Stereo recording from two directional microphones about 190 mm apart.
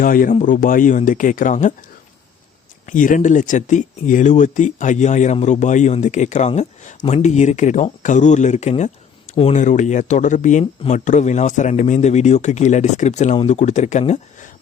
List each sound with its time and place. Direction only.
0.0 s speech: 45° left (ahead or behind)
2.8 s speech: 45° left (ahead or behind)